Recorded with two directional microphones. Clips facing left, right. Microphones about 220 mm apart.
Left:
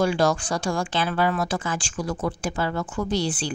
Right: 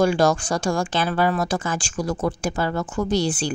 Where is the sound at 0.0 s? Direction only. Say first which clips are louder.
Right 3 dB; 45° right (ahead or behind).